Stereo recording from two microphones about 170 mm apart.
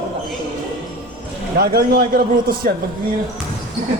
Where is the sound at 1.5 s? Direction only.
65° right (ahead or behind).